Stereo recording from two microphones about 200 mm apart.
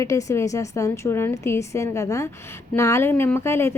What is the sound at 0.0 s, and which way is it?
A woman's voice, 15° left (ahead or behind).